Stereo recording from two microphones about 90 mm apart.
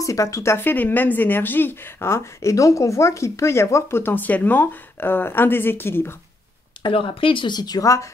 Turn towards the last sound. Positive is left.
turn(degrees=50)  # may be behind; listen again after turning